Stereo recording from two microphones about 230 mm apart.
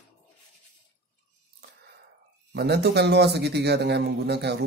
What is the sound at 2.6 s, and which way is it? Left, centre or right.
Speech, right.